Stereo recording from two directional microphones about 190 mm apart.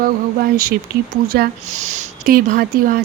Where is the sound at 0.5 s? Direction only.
50° right (ahead or behind).